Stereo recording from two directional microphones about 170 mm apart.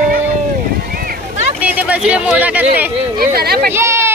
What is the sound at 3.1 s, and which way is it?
Speech, 65° right (ahead or behind).